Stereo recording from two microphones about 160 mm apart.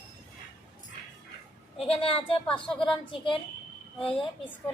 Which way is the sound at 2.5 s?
5° left (ahead or behind).